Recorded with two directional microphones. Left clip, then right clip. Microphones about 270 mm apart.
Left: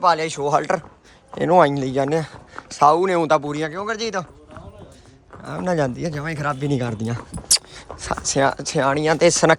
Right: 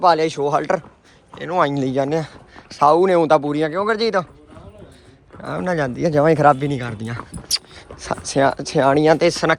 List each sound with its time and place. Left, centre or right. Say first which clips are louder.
0.0 s speech: right 3 dB; centre
5.4 s speech: right 1 dB; centre
6.7 s speech: left 2 dB; centre